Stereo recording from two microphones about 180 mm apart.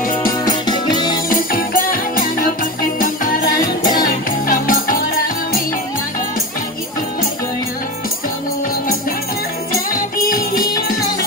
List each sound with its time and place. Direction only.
0.3 s music: 20° left (ahead or behind)
1.3 s music: 50° left (ahead or behind)
10.3 s music: 20° left (ahead or behind)